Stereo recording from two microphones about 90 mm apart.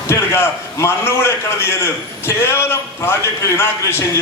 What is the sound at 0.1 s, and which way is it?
A man's voice, 25° left (ahead or behind).